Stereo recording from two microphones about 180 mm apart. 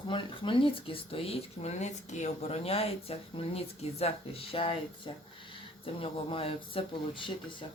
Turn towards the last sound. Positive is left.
turn(degrees=30)  # may be behind; listen again after turning